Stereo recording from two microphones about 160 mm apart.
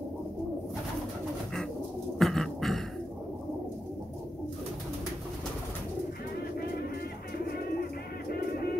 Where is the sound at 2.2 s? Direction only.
Centre (ahead or behind).